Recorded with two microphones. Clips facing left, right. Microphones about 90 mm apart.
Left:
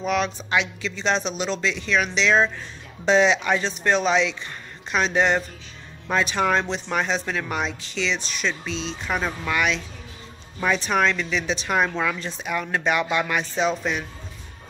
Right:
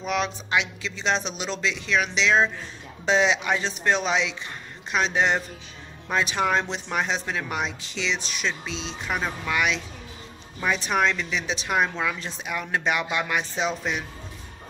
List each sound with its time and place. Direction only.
0.0 s speech: 5° right (ahead or behind)